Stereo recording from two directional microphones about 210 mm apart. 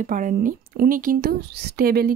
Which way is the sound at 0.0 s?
40° right (ahead or behind).